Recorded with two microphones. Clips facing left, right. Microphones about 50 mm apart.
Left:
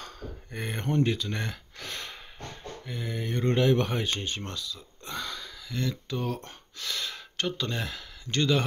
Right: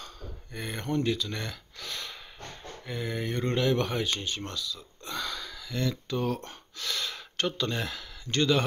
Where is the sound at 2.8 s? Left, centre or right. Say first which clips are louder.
Right 2 dB; centre.